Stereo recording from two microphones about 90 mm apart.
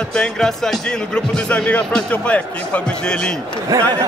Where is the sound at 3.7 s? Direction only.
40° right (ahead or behind).